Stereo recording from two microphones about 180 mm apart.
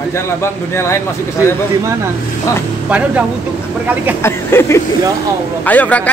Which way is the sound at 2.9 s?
5° right (ahead or behind).